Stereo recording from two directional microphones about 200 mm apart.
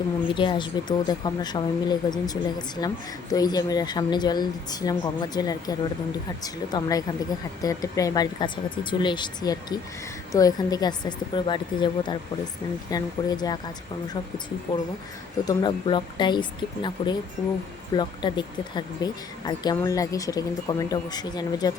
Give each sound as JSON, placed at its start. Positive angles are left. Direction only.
{"t": 0.3, "sound": "a woman's voice", "side_deg": 25}
{"t": 15.4, "sound": "a woman's voice", "side_deg": 25}